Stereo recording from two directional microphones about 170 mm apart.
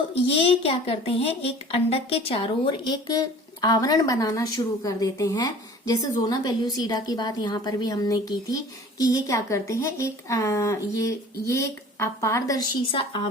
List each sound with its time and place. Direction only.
0.1 s a woman's voice: 35° left (ahead or behind); by 12.5 s 15° left (ahead or behind)
12.8 s a woman's voice: 30° left (ahead or behind)